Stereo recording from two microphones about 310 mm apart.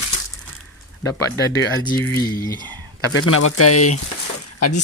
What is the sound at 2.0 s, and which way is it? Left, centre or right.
Speech, centre.